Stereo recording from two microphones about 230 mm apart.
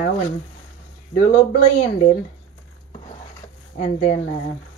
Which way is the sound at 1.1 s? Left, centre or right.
Left.